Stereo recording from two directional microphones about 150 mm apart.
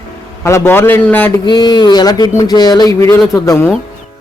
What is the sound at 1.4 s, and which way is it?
A man's voice, 30° left (ahead or behind).